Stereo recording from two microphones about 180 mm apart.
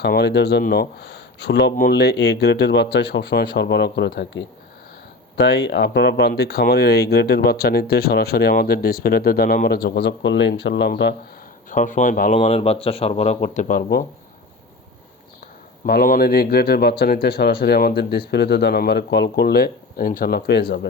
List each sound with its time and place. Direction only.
0.0 s speech: 65° left (ahead or behind)
11.7 s speech: 45° left (ahead or behind)
12.3 s speech: 35° left (ahead or behind); by 14.0 s 50° left (ahead or behind)
15.9 s speech: 50° left (ahead or behind)